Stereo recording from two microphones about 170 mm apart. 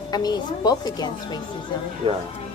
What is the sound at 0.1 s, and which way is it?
A woman's voice, 25° left (ahead or behind).